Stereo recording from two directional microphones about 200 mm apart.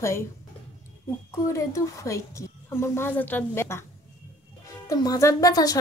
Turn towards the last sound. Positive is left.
turn(degrees=20)  # may be behind; listen again after turning